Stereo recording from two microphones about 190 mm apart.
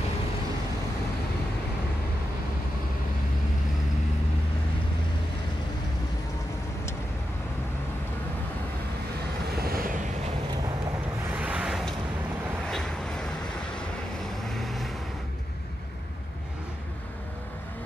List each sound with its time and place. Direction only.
9.6 s vehicle: 50° right (ahead or behind)
11.3 s vehicle: 5° right (ahead or behind)